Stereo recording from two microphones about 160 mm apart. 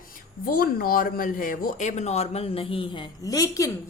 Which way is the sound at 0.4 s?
65° left (ahead or behind).